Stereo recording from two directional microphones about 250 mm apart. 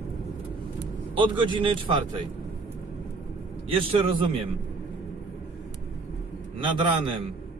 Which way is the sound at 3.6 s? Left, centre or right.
Right.